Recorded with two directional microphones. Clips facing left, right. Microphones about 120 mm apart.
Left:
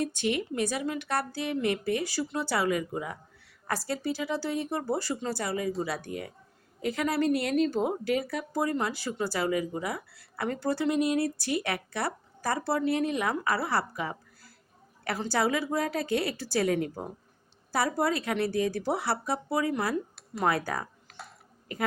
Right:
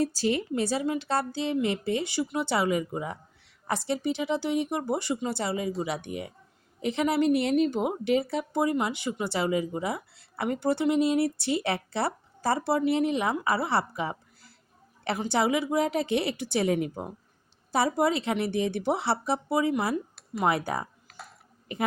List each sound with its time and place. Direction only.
0.0 s a woman's voice: 35° right (ahead or behind)
21.1 s a sound: centre (ahead or behind)
21.7 s a woman's voice: 25° right (ahead or behind)